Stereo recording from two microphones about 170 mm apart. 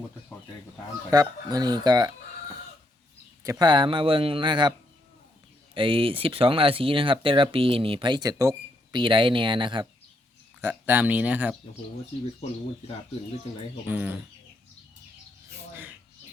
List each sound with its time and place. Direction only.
1.1 s a man's voice: 25° right (ahead or behind)
3.4 s a man's voice: 20° right (ahead or behind)
5.7 s speech: 30° right (ahead or behind)
9.0 s a man's voice: 30° right (ahead or behind)
10.6 s speech: 10° right (ahead or behind)
13.8 s speech: 10° right (ahead or behind)
15.7 s a sound: 10° right (ahead or behind)